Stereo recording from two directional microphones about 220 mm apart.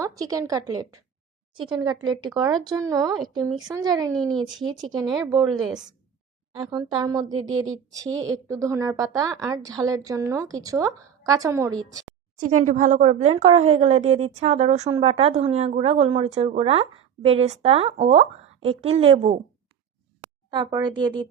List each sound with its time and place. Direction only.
0.0 s a woman's voice: 15° right (ahead or behind)
4.1 s speech: centre (ahead or behind)
4.4 s a woman's voice: 20° right (ahead or behind)
6.5 s a woman's voice: 20° right (ahead or behind)
12.4 s a woman's voice: 35° right (ahead or behind)
20.5 s a woman's voice: 20° right (ahead or behind)